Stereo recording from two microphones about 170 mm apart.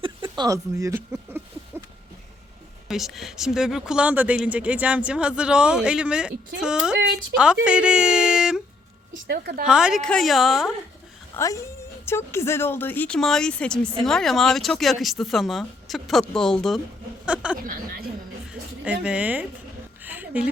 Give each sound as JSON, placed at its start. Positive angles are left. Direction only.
{"t": 0.0, "sound": "speech", "side_deg": -25}
{"t": 2.9, "sound": "speech", "side_deg": 0}
{"t": 9.2, "sound": "a woman's voice", "side_deg": -70}
{"t": 9.6, "sound": "speech", "side_deg": -5}
{"t": 11.3, "sound": "speech", "side_deg": 20}
{"t": 17.2, "sound": "a sound", "side_deg": -5}
{"t": 18.9, "sound": "speech", "side_deg": -10}
{"t": 20.0, "sound": "a sound", "side_deg": -10}